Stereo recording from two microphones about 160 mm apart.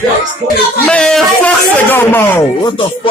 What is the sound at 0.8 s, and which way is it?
Speech, 5° left (ahead or behind).